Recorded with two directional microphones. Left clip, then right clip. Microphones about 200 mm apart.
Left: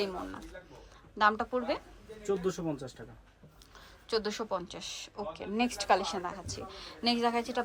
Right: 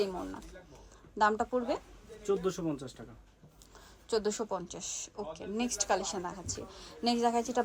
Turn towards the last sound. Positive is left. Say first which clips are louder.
# even
turn(degrees=-20)  # may be behind; listen again after turning